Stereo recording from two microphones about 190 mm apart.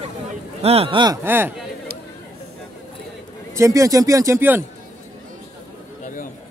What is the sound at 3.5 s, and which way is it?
Speech, 15° right (ahead or behind).